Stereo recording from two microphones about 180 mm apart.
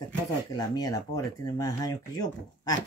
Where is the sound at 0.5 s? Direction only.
20° left (ahead or behind).